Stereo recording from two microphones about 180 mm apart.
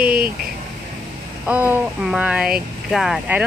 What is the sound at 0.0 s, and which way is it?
Speech, 55° right (ahead or behind).